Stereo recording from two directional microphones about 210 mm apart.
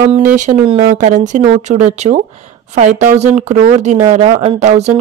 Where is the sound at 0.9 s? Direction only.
35° right (ahead or behind).